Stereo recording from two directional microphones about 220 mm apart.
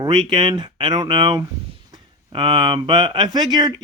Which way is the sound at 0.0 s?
20° right (ahead or behind).